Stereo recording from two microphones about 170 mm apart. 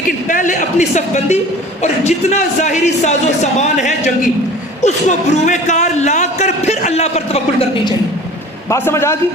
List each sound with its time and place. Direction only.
0.3 s a man's voice: 50° left (ahead or behind)
8.7 s a man's voice: 15° left (ahead or behind)